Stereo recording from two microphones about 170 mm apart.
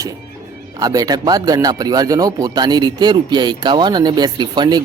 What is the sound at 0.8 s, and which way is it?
Speech, 20° right (ahead or behind).